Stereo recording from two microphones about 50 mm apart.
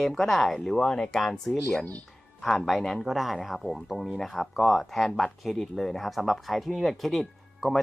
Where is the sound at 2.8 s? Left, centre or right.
Centre.